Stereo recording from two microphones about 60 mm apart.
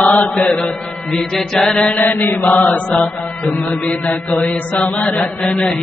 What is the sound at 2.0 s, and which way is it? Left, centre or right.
Mantra, left.